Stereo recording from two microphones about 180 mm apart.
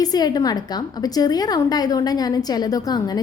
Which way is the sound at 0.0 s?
20° left (ahead or behind).